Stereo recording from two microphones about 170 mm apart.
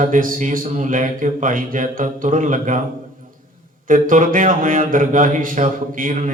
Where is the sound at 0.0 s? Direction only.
50° right (ahead or behind).